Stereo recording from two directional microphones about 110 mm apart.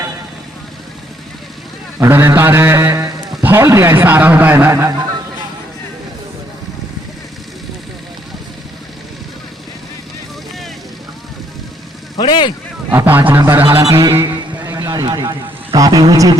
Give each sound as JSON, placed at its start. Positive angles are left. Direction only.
{"t": 2.0, "sound": "a man's voice", "side_deg": -20}
{"t": 12.1, "sound": "vehicle", "side_deg": 45}
{"t": 13.1, "sound": "a sound", "side_deg": -15}
{"t": 13.8, "sound": "a man's voice", "side_deg": -30}
{"t": 14.2, "sound": "a sound", "side_deg": -25}
{"t": 15.1, "sound": "a man's voice", "side_deg": -35}